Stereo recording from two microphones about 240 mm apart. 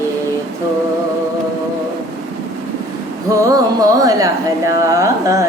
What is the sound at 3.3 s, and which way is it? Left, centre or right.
Female singing, centre.